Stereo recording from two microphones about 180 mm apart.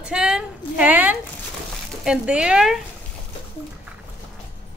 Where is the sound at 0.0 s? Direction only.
5° right (ahead or behind).